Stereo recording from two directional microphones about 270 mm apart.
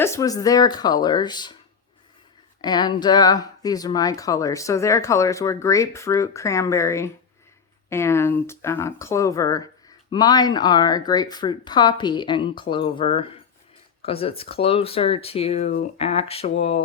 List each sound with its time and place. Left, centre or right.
0.0 s speech: centre
2.6 s speech: centre